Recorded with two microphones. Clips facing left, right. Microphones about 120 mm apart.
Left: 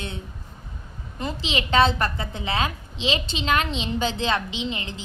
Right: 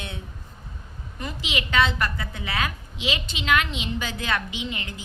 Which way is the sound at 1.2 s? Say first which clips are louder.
Left 3 dB; 30° left (ahead or behind).